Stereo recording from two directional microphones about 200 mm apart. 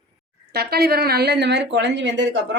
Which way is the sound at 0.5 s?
50° right (ahead or behind).